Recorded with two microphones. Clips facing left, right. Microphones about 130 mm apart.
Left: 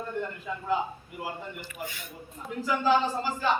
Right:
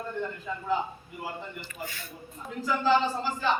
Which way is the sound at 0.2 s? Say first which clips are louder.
Even; 10° left (ahead or behind).